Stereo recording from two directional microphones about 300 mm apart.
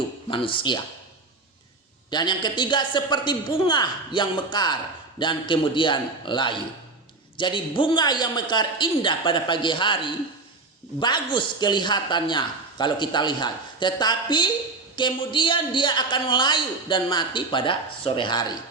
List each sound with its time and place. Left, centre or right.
0.3 s a man's voice: centre
2.0 s a man's voice: centre